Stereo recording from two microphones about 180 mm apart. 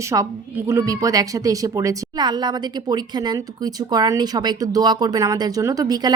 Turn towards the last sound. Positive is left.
turn(degrees=-20)  # may be behind; listen again after turning